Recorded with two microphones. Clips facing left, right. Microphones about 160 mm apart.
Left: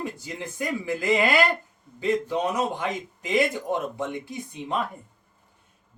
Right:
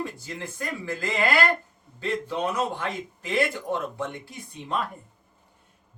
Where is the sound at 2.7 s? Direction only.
15° left (ahead or behind).